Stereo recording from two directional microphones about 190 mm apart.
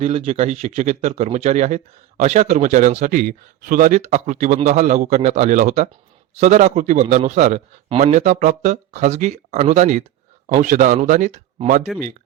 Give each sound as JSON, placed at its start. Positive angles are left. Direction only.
{"t": 0.0, "sound": "speech", "side_deg": -35}